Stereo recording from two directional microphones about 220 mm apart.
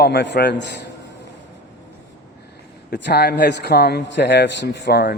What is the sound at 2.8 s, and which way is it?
A man's voice, 50° left (ahead or behind).